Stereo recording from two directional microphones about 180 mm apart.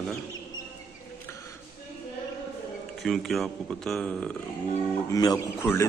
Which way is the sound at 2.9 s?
Centre (ahead or behind).